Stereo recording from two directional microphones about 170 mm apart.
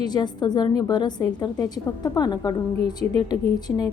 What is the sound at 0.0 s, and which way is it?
A woman's voice, 25° left (ahead or behind).